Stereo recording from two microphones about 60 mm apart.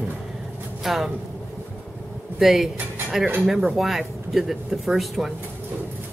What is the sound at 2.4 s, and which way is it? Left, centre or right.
Speech, centre.